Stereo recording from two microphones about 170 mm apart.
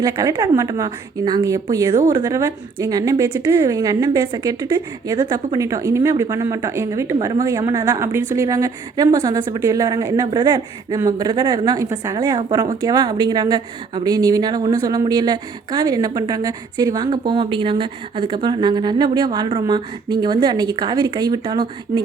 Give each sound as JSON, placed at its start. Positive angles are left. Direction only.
{"t": 0.0, "sound": "a woman's voice", "side_deg": -20}